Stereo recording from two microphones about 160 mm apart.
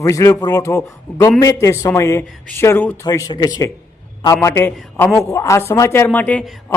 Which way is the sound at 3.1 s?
25° left (ahead or behind).